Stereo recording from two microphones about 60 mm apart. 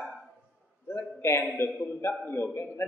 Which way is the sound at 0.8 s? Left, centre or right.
Left.